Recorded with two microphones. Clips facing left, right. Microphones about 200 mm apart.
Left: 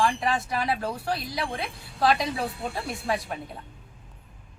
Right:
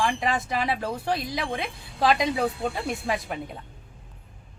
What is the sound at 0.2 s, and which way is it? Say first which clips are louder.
Speech: right 1 dB; 20° right (ahead or behind).